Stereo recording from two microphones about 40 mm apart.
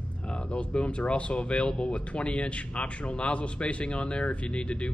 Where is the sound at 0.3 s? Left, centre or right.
Left.